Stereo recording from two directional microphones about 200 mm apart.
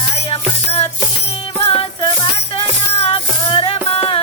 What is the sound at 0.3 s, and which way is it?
Music, 30° left (ahead or behind).